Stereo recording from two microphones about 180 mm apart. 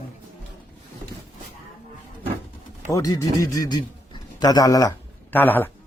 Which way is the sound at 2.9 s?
20° left (ahead or behind).